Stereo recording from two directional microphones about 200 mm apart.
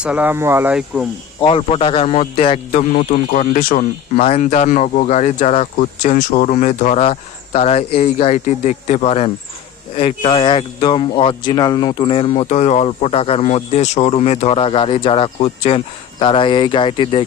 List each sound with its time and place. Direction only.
0.0 s speech: 5° right (ahead or behind)
1.4 s speech: 25° left (ahead or behind)